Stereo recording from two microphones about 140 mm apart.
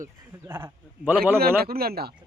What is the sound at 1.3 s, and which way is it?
Speech, 90° right.